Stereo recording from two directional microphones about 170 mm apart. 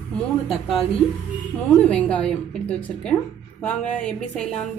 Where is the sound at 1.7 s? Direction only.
5° left (ahead or behind).